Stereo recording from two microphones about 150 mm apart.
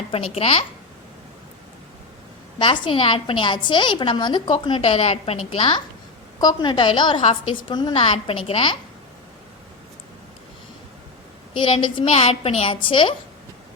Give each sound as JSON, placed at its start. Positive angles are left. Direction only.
{"t": 0.1, "sound": "a woman's voice", "side_deg": 40}
{"t": 2.6, "sound": "a woman's voice", "side_deg": 35}
{"t": 11.5, "sound": "a woman's voice", "side_deg": 35}